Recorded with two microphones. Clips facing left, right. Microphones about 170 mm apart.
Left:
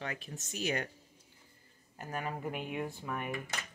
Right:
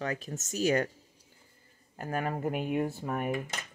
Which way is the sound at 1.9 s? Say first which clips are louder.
Right 6 dB; 50° right (ahead or behind).